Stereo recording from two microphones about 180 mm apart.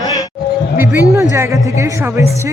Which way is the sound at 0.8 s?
15° right (ahead or behind).